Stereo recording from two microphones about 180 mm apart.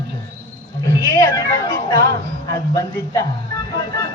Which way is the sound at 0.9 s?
15° left (ahead or behind).